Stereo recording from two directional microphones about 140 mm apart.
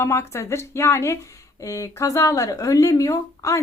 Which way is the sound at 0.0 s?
20° left (ahead or behind).